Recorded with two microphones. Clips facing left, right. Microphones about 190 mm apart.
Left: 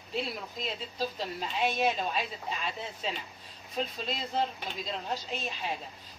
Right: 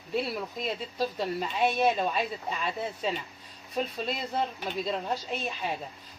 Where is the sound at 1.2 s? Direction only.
50° right (ahead or behind).